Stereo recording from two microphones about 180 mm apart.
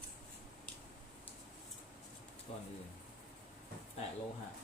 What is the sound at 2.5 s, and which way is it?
Speech, 35° left (ahead or behind).